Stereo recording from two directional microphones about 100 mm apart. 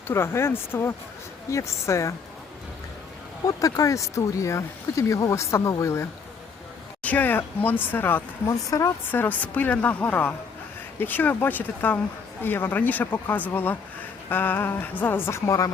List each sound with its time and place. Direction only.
0.1 s speech: 25° left (ahead or behind)
3.4 s speech: 35° left (ahead or behind)
7.0 s a woman's voice: 15° left (ahead or behind)
15.4 s speech: 35° left (ahead or behind)